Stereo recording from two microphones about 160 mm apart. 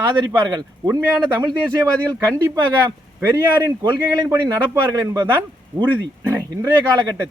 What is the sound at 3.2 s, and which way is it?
Speech, 15° right (ahead or behind).